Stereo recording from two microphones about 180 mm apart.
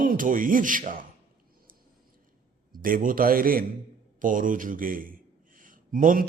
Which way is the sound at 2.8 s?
50° right (ahead or behind).